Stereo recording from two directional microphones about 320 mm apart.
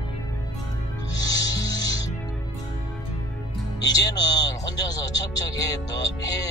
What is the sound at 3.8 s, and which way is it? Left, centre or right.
Speech, centre.